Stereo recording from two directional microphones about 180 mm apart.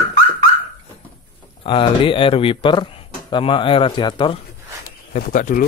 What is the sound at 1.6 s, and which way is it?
Speech, 30° left (ahead or behind).